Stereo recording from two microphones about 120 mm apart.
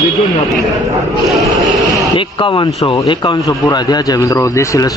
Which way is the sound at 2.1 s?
45° left (ahead or behind).